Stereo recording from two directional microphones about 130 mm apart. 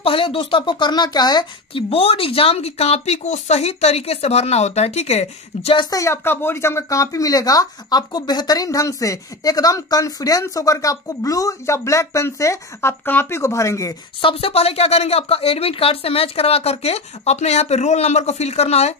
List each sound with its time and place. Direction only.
0.0 s speech: 45° left (ahead or behind)
1.7 s speech: 45° left (ahead or behind)
5.8 s speech: 25° left (ahead or behind)
14.2 s speech: 50° left (ahead or behind)